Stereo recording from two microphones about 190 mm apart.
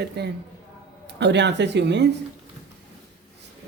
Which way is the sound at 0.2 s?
60° right (ahead or behind).